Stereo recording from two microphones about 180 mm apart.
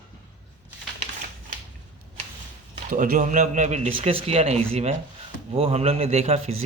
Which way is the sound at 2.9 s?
50° right (ahead or behind).